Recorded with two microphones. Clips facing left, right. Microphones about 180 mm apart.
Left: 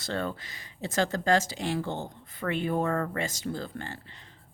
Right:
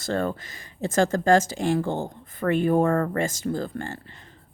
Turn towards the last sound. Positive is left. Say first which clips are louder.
# right 6 dB
turn(degrees=-50)  # may be behind; listen again after turning